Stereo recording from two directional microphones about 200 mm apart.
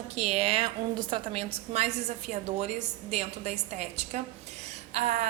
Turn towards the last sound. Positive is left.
turn(degrees=-35)  # may be behind; listen again after turning